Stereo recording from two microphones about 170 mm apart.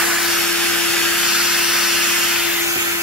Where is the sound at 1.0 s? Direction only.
Centre (ahead or behind).